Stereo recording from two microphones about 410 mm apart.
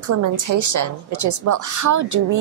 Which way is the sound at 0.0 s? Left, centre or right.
Right.